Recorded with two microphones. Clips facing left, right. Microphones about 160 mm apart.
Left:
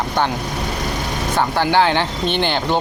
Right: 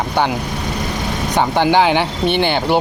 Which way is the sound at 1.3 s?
15° right (ahead or behind).